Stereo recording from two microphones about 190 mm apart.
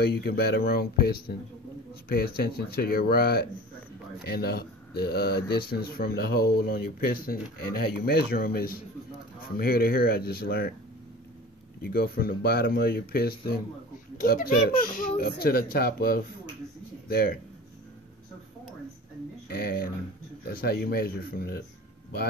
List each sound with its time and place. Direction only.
0.0 s speech: 55° left (ahead or behind)
11.8 s a child's voice: 55° left (ahead or behind)
19.5 s speech: 55° left (ahead or behind)